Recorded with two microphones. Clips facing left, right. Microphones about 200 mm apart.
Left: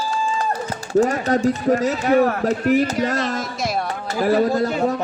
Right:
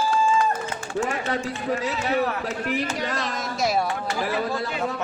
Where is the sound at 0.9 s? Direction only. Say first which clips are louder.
Left 9 dB; 40° left (ahead or behind).